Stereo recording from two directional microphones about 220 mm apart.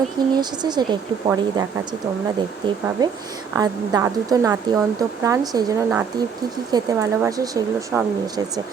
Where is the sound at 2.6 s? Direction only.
20° right (ahead or behind).